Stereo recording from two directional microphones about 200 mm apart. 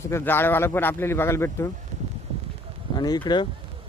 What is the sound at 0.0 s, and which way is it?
Speech, 10° left (ahead or behind).